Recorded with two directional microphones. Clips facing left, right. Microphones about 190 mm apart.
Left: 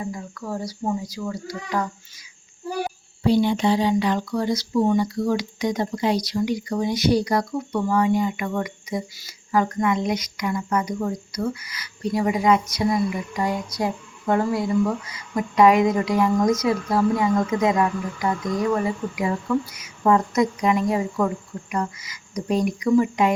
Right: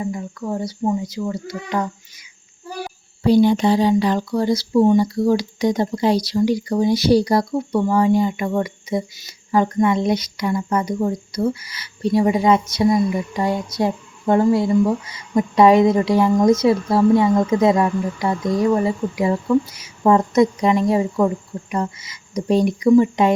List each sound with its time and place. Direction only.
0.0 s speech: 25° right (ahead or behind)
3.2 s speech: 40° right (ahead or behind)